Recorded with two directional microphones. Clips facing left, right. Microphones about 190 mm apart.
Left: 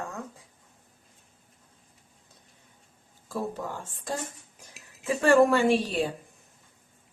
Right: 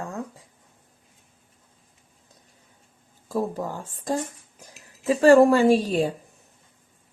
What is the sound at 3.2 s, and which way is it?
A woman's voice, 40° right (ahead or behind).